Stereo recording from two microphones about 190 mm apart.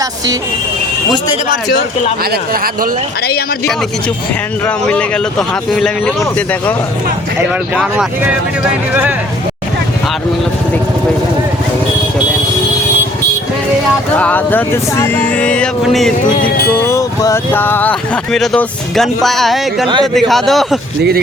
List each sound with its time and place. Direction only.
2.3 s speech: 50° right (ahead or behind)
4.6 s speech: 5° left (ahead or behind)
7.8 s speech: 5° right (ahead or behind)
14.2 s speech: 10° left (ahead or behind)
16.3 s music: 50° left (ahead or behind)
16.8 s speech: 15° left (ahead or behind); by 20.7 s centre (ahead or behind)